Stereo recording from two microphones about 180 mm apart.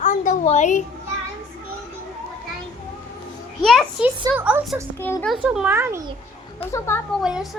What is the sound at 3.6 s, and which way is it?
Speech, centre (ahead or behind).